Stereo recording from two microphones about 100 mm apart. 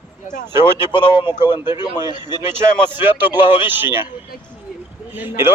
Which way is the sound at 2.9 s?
20° right (ahead or behind).